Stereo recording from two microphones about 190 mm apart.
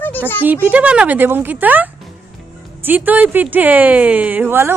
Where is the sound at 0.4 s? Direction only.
10° right (ahead or behind).